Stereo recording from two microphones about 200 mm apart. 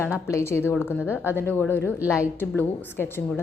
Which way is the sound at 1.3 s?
10° left (ahead or behind).